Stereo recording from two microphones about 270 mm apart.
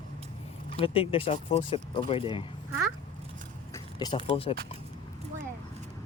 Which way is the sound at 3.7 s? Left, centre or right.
Centre.